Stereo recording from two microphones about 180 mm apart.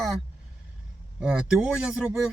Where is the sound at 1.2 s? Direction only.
5° right (ahead or behind).